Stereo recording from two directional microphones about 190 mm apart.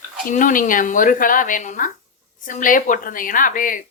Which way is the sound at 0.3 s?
45° left (ahead or behind).